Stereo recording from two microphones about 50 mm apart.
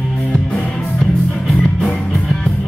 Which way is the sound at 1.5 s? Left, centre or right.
Centre.